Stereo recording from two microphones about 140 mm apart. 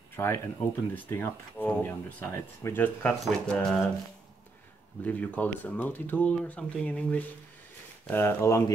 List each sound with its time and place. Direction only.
0.1 s a sound: 15° left (ahead or behind)
0.9 s speech: 15° left (ahead or behind)
3.1 s speech: 5° left (ahead or behind)
5.0 s speech: 10° left (ahead or behind)